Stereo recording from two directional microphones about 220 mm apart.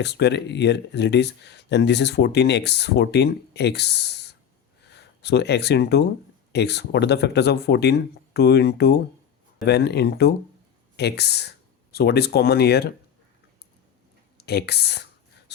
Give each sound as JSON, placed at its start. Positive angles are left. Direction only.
{"t": 0.0, "sound": "speech", "side_deg": 50}
{"t": 14.3, "sound": "speech", "side_deg": 45}